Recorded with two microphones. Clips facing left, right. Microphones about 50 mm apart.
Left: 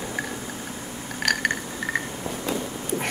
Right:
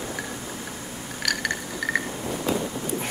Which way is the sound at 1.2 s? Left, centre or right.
Left.